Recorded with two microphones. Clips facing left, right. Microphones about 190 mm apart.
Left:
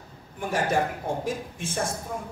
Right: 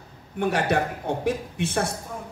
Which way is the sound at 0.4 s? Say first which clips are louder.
Right 2 dB; 65° right (ahead or behind).